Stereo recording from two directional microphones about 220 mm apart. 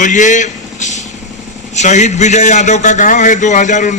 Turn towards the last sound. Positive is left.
turn(degrees=35)  # may be behind; listen again after turning